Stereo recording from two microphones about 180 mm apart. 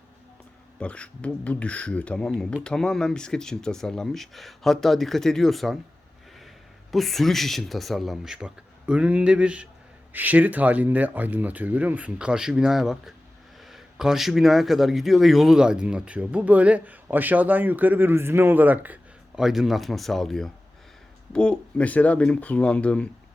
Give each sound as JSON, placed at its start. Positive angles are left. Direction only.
{"t": 0.8, "sound": "speech", "side_deg": 5}
{"t": 6.9, "sound": "speech", "side_deg": 0}